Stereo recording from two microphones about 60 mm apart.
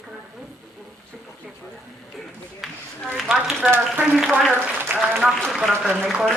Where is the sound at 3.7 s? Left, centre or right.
Right.